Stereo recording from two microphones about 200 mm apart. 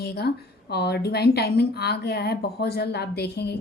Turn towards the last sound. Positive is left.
turn(degrees=55)  # may be behind; listen again after turning